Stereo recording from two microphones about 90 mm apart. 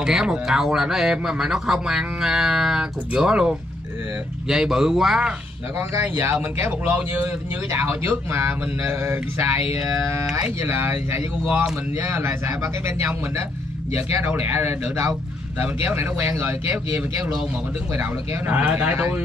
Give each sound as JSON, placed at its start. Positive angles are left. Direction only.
{"t": 0.0, "sound": "speech", "side_deg": -5}
{"t": 6.0, "sound": "speech", "side_deg": -25}
{"t": 10.6, "sound": "speech", "side_deg": -25}
{"t": 14.2, "sound": "speech", "side_deg": -25}
{"t": 17.9, "sound": "speech", "side_deg": -20}